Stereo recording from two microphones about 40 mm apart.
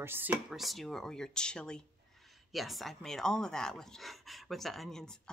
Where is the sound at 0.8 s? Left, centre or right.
Centre.